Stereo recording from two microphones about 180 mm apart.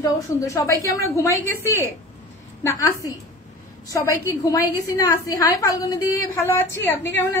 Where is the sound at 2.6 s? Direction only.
15° left (ahead or behind).